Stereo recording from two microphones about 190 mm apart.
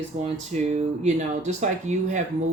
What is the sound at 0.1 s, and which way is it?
Speech, 40° right (ahead or behind).